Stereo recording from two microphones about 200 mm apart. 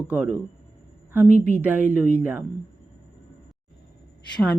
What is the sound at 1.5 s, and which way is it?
Speech, 10° right (ahead or behind).